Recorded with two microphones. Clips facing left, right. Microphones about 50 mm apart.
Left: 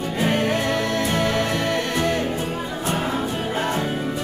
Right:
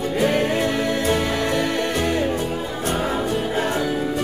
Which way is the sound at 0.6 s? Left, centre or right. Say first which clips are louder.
Right 1 dB; centre.